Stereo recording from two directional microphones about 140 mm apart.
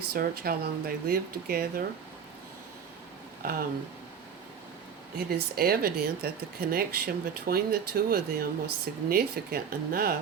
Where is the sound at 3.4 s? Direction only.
90° right.